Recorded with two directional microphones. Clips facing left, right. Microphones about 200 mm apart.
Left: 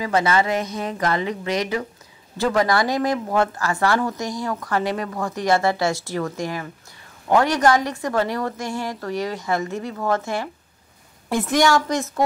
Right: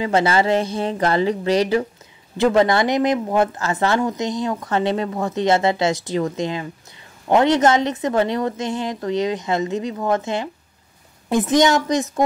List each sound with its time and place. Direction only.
0.0 s speech: 30° right (ahead or behind)